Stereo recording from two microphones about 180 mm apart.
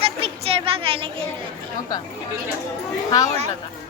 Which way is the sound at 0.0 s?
30° right (ahead or behind).